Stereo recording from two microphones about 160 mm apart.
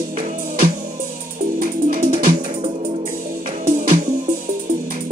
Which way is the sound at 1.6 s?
60° right (ahead or behind).